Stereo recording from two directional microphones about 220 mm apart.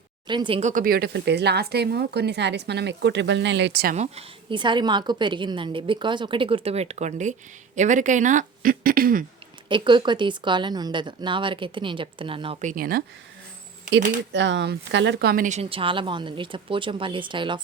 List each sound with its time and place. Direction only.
0.3 s speech: 20° right (ahead or behind)
0.7 s a woman's voice: 40° right (ahead or behind)
3.9 s speech: 30° right (ahead or behind)
9.6 s speech: 20° right (ahead or behind)
12.7 s speech: 40° right (ahead or behind); by 17.6 s 20° right (ahead or behind)